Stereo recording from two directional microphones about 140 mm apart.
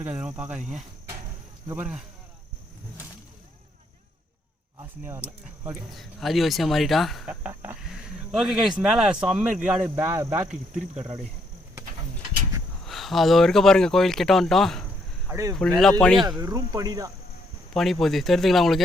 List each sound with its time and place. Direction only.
0.0 s speech: 10° right (ahead or behind)
4.8 s speech: 15° right (ahead or behind)
5.9 s speech: centre (ahead or behind)
7.4 s speech: 10° right (ahead or behind)
12.8 s speech: centre (ahead or behind)
15.3 s speech: 20° right (ahead or behind)
15.5 s speech: 5° left (ahead or behind)
16.4 s speech: 25° right (ahead or behind)
18.0 s speech: centre (ahead or behind)